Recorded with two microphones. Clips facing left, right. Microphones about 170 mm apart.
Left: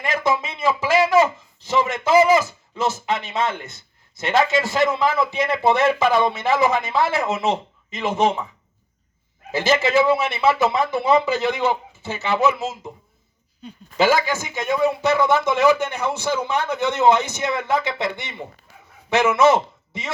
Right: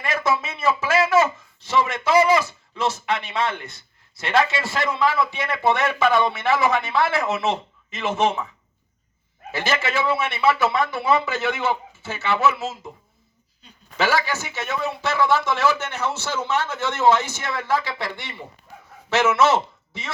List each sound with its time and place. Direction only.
0.0 s a sound: 15° left (ahead or behind)
3.1 s a man's voice: 20° left (ahead or behind)
9.5 s a man's voice: 20° left (ahead or behind)
13.9 s a man's voice: 15° left (ahead or behind)